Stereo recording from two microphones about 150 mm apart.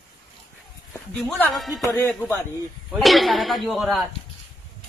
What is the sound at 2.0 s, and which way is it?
Speech, 15° left (ahead or behind).